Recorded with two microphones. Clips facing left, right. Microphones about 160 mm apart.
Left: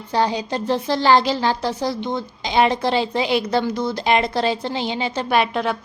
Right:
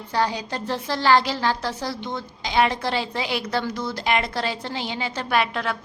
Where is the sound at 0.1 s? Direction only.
20° left (ahead or behind).